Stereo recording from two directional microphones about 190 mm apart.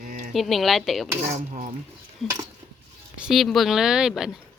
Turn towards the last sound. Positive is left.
turn(degrees=-5)  # may be behind; listen again after turning